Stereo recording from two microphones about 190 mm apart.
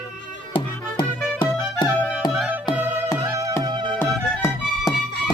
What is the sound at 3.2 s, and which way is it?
Music, 20° right (ahead or behind).